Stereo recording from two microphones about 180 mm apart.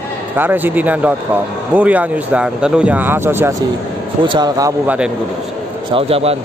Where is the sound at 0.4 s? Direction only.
10° right (ahead or behind).